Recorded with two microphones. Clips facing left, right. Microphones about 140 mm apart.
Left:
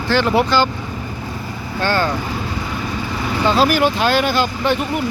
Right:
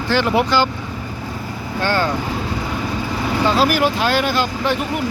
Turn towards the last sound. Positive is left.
turn(degrees=0)  # may be behind; listen again after turning